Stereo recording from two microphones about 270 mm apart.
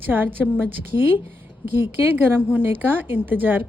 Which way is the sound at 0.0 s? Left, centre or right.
Centre.